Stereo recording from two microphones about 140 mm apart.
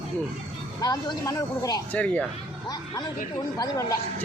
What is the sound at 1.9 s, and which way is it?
Speech, 10° left (ahead or behind).